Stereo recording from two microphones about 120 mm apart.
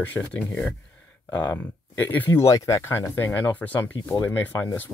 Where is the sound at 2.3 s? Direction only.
25° left (ahead or behind).